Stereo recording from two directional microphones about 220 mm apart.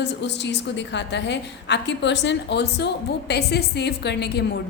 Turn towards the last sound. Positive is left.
turn(degrees=50)  # may be behind; listen again after turning